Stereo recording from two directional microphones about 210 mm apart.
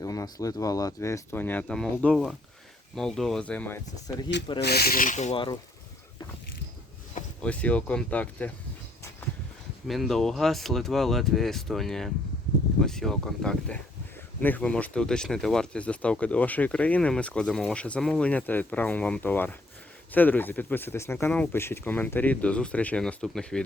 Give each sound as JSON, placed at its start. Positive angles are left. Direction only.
{"t": 0.0, "sound": "speech", "side_deg": 15}
{"t": 4.6, "sound": "speech", "side_deg": 50}
{"t": 7.4, "sound": "speech", "side_deg": 5}
{"t": 9.8, "sound": "speech", "side_deg": 0}